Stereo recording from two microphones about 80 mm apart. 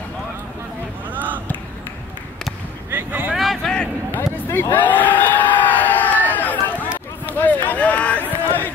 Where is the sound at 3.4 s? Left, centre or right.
Centre.